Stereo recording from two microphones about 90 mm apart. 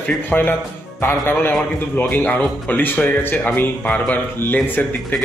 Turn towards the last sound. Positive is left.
turn(degrees=20)  # may be behind; listen again after turning